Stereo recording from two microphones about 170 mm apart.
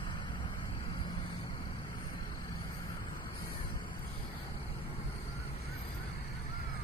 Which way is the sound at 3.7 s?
25° left (ahead or behind).